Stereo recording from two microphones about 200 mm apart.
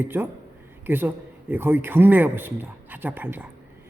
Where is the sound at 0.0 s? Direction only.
10° right (ahead or behind).